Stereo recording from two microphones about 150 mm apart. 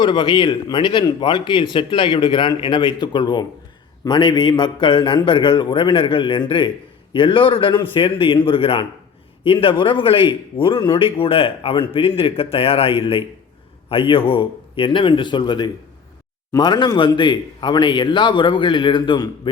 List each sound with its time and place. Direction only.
0.0 s a man's voice: 30° left (ahead or behind)